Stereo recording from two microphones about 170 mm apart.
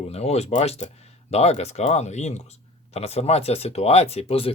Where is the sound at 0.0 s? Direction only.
40° left (ahead or behind).